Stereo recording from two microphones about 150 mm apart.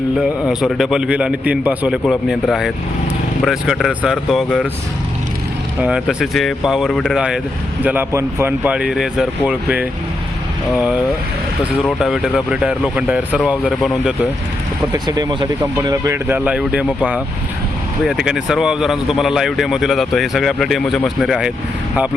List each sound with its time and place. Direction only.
0.2 s speech: centre (ahead or behind)
2.0 s speech: centre (ahead or behind)
5.8 s speech: 5° right (ahead or behind)
11.9 s speech: 5° right (ahead or behind)
14.9 s speech: 25° right (ahead or behind)
15.9 s speech: 20° right (ahead or behind); by 21.5 s 5° right (ahead or behind)